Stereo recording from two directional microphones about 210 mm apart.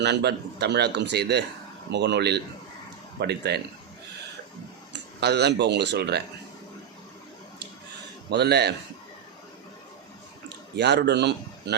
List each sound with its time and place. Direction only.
0.0 s speech: 55° right (ahead or behind)
5.2 s speech: 50° right (ahead or behind)
8.3 s speech: 50° right (ahead or behind)
10.8 s a man's voice: 55° right (ahead or behind)